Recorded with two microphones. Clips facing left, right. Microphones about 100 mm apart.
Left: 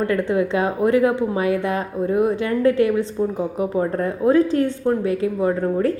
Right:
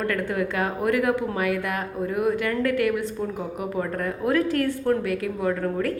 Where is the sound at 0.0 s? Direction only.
25° left (ahead or behind).